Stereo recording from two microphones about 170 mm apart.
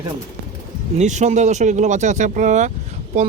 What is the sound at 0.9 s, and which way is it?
Speech, 45° right (ahead or behind).